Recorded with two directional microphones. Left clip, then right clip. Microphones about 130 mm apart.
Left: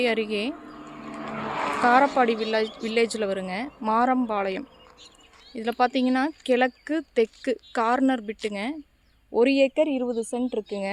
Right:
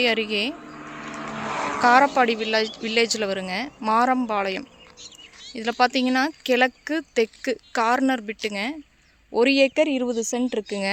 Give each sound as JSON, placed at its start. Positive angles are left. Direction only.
{"t": 0.0, "sound": "speech", "side_deg": 5}
{"t": 0.5, "sound": "a sound", "side_deg": -5}
{"t": 0.9, "sound": "vehicle", "side_deg": 20}
{"t": 1.4, "sound": "vehicle", "side_deg": -50}
{"t": 1.8, "sound": "speech", "side_deg": 5}
{"t": 9.3, "sound": "speech", "side_deg": 0}